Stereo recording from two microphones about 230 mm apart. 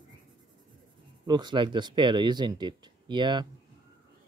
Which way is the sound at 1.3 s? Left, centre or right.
Centre.